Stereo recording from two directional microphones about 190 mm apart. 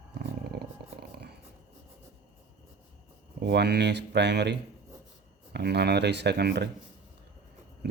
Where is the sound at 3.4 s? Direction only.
60° right (ahead or behind).